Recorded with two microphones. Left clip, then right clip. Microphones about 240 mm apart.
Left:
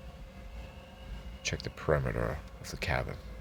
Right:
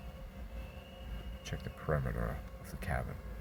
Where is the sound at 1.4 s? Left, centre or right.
Left.